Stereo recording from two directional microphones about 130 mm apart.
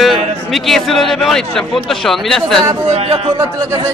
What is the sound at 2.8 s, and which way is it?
Speech, 55° right (ahead or behind).